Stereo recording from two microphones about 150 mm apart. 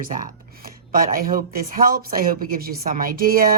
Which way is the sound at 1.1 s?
70° right (ahead or behind).